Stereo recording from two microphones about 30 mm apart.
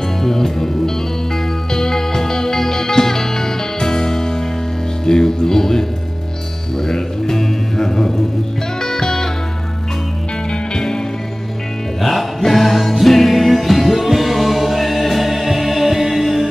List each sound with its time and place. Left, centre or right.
0.2 s music: centre
10.7 s music: left
12.0 s music: centre